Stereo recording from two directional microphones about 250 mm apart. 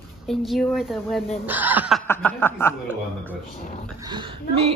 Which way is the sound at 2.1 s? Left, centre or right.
Centre.